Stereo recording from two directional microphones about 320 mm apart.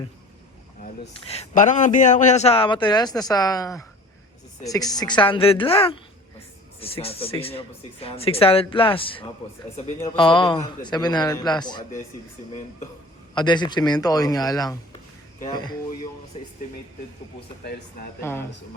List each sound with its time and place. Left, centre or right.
1.3 s a man's voice: left
13.3 s a man's voice: centre
18.2 s a man's voice: centre